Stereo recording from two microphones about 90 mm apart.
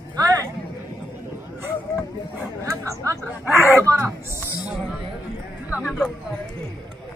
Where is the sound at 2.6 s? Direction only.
35° right (ahead or behind).